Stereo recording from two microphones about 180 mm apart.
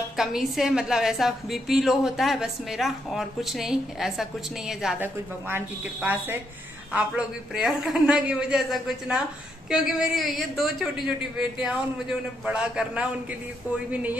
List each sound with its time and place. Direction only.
0.2 s a woman's voice: centre (ahead or behind)